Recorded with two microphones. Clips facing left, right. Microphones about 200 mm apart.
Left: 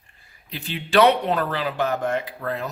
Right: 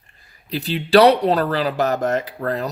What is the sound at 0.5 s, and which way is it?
Speech, 35° right (ahead or behind).